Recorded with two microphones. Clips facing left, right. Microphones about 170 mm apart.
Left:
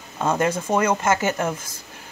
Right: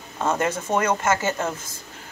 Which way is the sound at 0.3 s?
15° left (ahead or behind).